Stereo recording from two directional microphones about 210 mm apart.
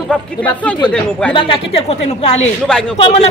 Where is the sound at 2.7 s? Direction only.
5° left (ahead or behind).